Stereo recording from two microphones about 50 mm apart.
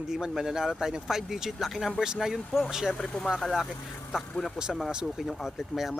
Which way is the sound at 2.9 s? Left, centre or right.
Centre.